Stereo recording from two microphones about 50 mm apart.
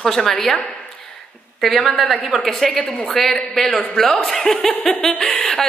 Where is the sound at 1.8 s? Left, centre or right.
Centre.